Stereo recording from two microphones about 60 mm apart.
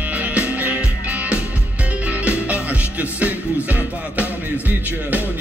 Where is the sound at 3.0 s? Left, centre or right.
Right.